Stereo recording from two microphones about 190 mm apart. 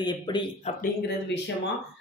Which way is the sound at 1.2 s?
70° left (ahead or behind).